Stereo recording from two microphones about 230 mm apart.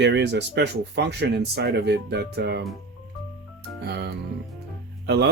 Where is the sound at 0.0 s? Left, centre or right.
Right.